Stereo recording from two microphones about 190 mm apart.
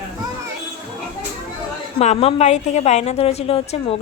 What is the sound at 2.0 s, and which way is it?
A woman's voice, 35° left (ahead or behind).